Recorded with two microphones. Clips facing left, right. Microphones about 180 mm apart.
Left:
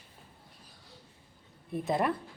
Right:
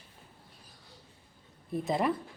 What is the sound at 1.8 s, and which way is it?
Speech, centre (ahead or behind).